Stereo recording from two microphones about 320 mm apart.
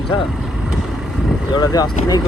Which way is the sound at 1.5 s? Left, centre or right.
Centre.